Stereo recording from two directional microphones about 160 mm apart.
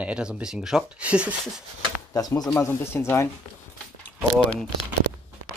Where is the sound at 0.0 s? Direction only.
5° right (ahead or behind).